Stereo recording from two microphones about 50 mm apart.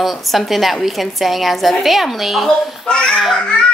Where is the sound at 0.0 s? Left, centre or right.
Centre.